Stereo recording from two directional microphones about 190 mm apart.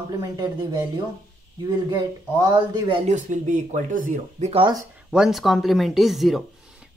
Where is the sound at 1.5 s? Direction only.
20° right (ahead or behind).